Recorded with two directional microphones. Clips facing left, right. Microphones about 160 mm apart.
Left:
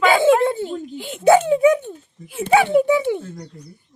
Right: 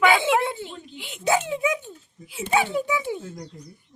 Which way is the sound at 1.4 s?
40° left (ahead or behind).